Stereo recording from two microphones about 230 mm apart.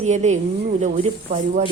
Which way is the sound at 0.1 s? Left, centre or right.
Right.